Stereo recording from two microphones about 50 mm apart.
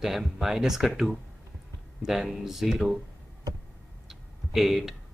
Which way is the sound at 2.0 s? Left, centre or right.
Centre.